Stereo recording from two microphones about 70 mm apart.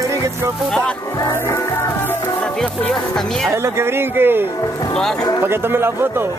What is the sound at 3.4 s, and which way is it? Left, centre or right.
Speech, right.